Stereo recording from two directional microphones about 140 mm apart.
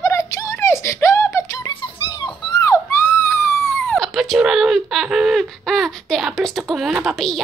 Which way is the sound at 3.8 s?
Centre (ahead or behind).